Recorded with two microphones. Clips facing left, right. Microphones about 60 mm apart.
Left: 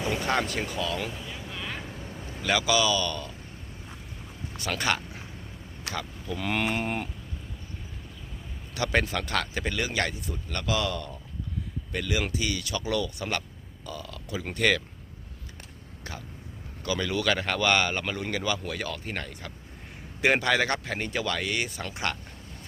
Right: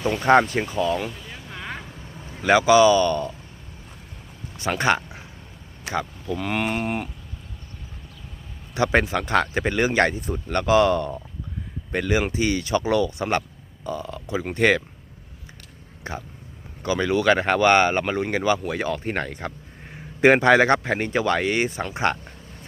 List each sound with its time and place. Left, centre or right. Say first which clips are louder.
0.2 s speech: right 10 dB; right
1.3 s vehicle: right 2 dB; right
2.4 s speech: right 10 dB; right
4.5 s a sound: right 7 dB; right
5.8 s speech: right 8 dB; right
6.2 s speech: even; centre
8.7 s speech: right 6 dB; right
16.1 s speech: right 7 dB; right